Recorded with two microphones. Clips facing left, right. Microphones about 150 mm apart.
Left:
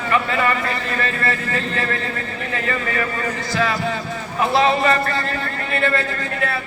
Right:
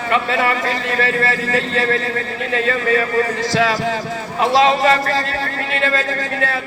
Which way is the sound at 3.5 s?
90° right.